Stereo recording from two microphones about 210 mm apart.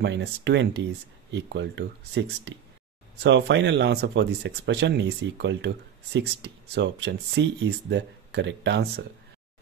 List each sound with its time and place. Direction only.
0.0 s speech: 55° right (ahead or behind)